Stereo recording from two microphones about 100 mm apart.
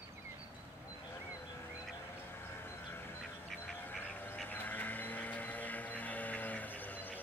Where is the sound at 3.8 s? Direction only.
20° left (ahead or behind).